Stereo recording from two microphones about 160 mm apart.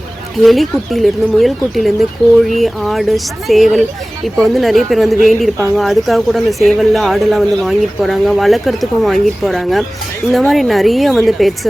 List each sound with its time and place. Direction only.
0.3 s speech: centre (ahead or behind)